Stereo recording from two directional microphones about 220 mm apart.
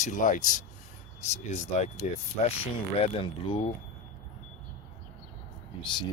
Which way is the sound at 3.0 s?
25° left (ahead or behind).